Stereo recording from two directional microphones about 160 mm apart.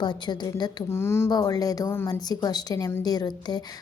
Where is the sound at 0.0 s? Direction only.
25° left (ahead or behind).